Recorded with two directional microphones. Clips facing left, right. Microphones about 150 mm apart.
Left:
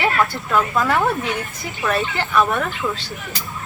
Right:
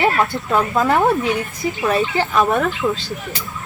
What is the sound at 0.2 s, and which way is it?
Speech, 25° right (ahead or behind).